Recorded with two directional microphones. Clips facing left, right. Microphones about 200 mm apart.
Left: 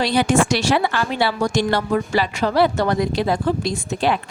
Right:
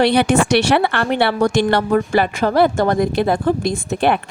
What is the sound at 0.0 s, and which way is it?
A woman's voice, 65° right (ahead or behind).